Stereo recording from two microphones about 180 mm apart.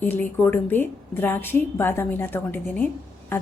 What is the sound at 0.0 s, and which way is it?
A woman's voice, 10° left (ahead or behind).